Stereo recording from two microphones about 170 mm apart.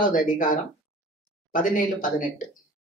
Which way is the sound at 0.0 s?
50° left (ahead or behind).